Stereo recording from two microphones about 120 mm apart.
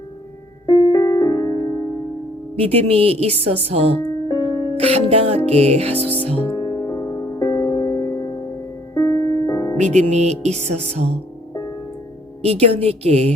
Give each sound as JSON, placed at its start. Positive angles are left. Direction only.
{"t": 0.7, "sound": "music", "side_deg": 35}
{"t": 2.6, "sound": "a woman's voice", "side_deg": -55}
{"t": 4.3, "sound": "music", "side_deg": 35}
{"t": 4.8, "sound": "a woman's voice", "side_deg": -55}
{"t": 6.5, "sound": "music", "side_deg": 30}
{"t": 9.7, "sound": "music", "side_deg": -75}
{"t": 10.4, "sound": "a woman's voice", "side_deg": -65}
{"t": 12.4, "sound": "a woman's voice", "side_deg": -60}